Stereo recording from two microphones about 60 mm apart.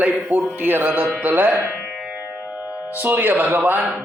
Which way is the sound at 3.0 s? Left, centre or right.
Right.